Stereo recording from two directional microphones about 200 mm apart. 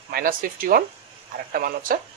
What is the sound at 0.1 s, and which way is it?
Speech, 45° right (ahead or behind).